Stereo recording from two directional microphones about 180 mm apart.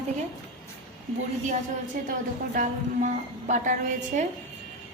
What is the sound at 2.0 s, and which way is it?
A woman's voice, 50° right (ahead or behind).